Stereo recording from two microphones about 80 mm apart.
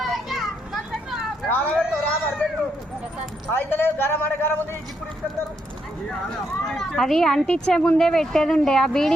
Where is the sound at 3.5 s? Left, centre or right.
Left.